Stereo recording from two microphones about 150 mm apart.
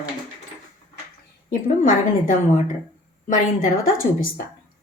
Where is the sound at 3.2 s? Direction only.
70° left (ahead or behind).